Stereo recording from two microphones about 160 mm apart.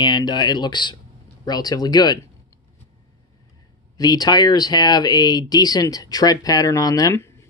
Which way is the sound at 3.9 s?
25° left (ahead or behind).